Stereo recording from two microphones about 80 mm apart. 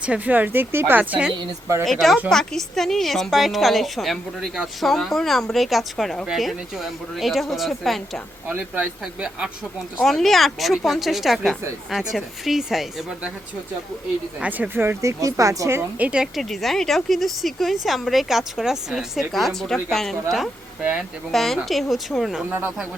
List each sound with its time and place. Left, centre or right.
0.0 s speech: centre
1.8 s a woman's voice: centre
8.4 s speech: centre
10.0 s a woman's voice: centre
14.8 s speech: right
15.2 s speech: right
16.0 s speech: centre
16.2 s a woman's voice: centre
21.3 s a woman's voice: centre